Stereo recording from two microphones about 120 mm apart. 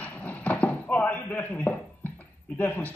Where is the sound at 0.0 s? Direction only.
10° left (ahead or behind).